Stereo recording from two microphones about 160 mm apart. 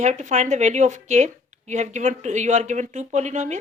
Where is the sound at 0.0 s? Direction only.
45° right (ahead or behind).